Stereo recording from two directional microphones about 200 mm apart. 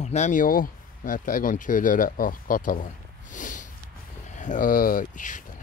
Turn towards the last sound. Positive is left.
turn(degrees=40)  # may be behind; listen again after turning